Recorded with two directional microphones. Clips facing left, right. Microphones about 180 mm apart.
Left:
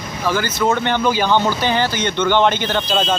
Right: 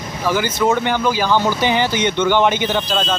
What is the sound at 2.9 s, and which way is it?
Speech, 5° left (ahead or behind).